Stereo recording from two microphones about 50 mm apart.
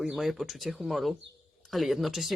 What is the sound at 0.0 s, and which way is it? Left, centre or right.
Speech, centre.